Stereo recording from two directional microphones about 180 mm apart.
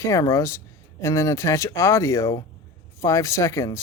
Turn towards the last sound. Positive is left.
turn(degrees=15)  # may be behind; listen again after turning